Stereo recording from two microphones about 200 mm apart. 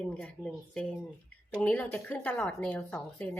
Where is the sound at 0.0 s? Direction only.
5° left (ahead or behind).